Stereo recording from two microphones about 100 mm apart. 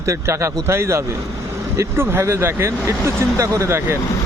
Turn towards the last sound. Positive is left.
turn(degrees=-30)  # may be behind; listen again after turning